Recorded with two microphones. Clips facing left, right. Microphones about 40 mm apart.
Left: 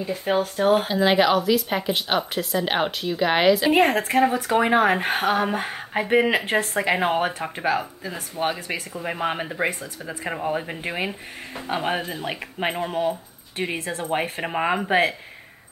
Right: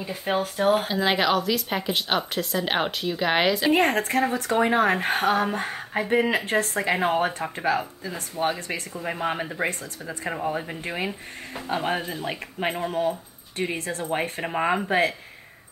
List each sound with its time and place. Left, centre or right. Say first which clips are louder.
0.0 s speech: left 3 dB; centre
8.4 s speech: even; left
8.7 s speech: left 2 dB; centre
13.1 s keys jangling: left 2 dB; centre
13.7 s speech: left 4 dB; centre